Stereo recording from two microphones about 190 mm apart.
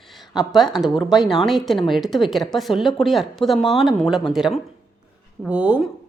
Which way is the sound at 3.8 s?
Centre (ahead or behind).